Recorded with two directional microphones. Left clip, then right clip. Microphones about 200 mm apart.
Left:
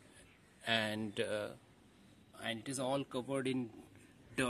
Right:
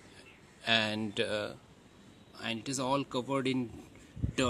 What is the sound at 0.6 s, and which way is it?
Speech, 5° left (ahead or behind).